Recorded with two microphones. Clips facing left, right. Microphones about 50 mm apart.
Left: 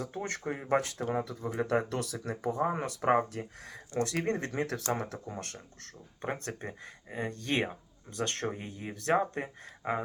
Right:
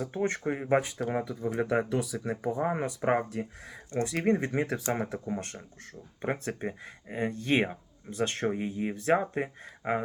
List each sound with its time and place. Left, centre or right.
0.1 s speech: right
3.0 s speech: centre
3.9 s speech: centre